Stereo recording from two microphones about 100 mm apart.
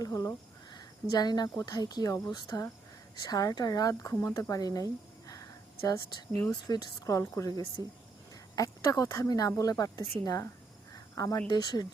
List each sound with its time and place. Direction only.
0.0 s speech: 35° left (ahead or behind)
5.3 s a sound: 35° left (ahead or behind)
6.5 s speech: 40° left (ahead or behind)
10.9 s cricket: 35° left (ahead or behind)
11.4 s speech: 45° left (ahead or behind)